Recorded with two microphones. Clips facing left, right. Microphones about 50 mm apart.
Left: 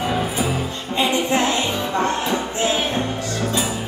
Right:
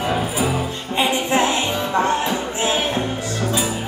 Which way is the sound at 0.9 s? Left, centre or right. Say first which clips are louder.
Right 1 dB; centre.